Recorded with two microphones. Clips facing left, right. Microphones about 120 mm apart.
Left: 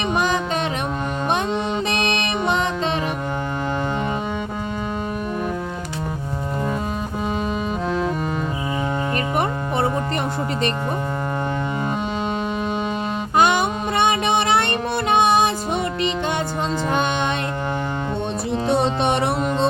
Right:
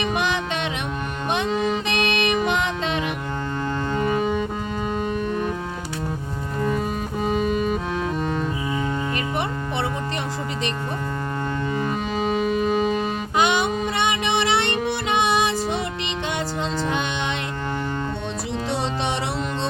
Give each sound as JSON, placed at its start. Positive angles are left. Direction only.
{"t": 0.1, "sound": "music", "side_deg": 40}
{"t": 1.9, "sound": "music", "side_deg": 35}
{"t": 13.3, "sound": "music", "side_deg": 45}
{"t": 18.7, "sound": "music", "side_deg": 55}